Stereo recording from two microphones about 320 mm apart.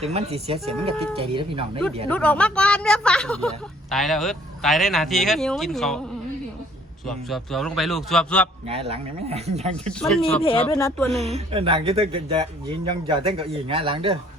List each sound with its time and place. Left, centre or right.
0.0 s speech: centre
2.0 s speech: centre
7.1 s speech: centre
8.6 s speech: centre
9.7 s speech: centre
10.4 s speech: centre
11.2 s speech: centre